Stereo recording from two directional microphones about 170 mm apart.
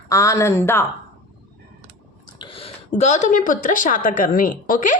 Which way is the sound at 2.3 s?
35° left (ahead or behind).